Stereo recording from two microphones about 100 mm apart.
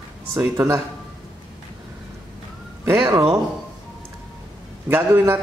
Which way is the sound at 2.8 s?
30° right (ahead or behind).